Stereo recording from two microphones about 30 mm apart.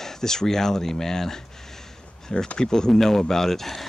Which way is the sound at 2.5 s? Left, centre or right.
Left.